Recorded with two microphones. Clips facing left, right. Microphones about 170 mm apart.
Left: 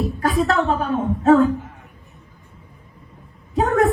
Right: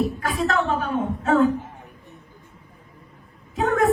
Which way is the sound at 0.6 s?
75° left (ahead or behind).